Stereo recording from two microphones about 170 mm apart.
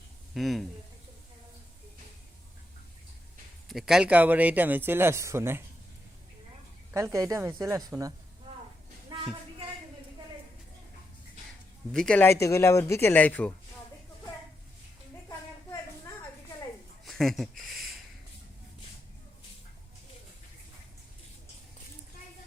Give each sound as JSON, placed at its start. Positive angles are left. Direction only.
{"t": 0.3, "sound": "speech", "side_deg": 0}
{"t": 3.7, "sound": "speech", "side_deg": 0}
{"t": 6.9, "sound": "speech", "side_deg": -15}
{"t": 9.0, "sound": "a sound", "side_deg": -30}
{"t": 11.9, "sound": "speech", "side_deg": 5}
{"t": 17.1, "sound": "a sound", "side_deg": 0}